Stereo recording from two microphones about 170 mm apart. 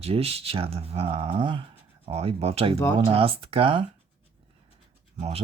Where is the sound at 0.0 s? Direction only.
35° right (ahead or behind).